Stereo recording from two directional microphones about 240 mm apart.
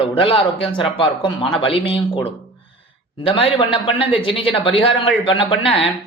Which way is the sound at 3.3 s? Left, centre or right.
Left.